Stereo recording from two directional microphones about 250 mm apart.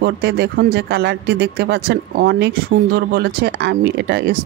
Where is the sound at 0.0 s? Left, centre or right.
Right.